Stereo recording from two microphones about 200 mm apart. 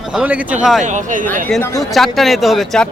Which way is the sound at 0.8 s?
40° right (ahead or behind).